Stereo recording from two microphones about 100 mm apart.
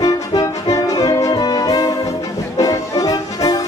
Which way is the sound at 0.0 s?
40° left (ahead or behind).